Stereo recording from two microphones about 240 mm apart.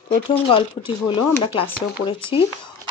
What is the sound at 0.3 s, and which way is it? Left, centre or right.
Speech, left.